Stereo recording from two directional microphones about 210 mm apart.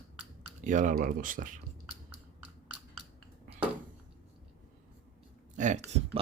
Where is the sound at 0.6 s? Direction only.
35° right (ahead or behind).